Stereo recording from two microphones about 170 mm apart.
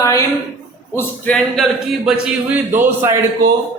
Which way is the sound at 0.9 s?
10° left (ahead or behind).